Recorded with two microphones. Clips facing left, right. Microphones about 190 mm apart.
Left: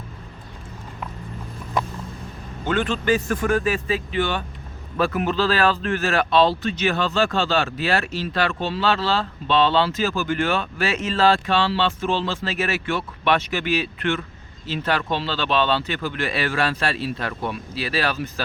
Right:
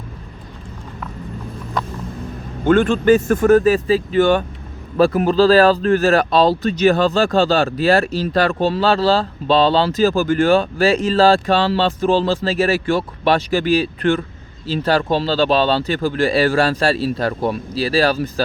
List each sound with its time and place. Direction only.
2.6 s speech: 50° right (ahead or behind)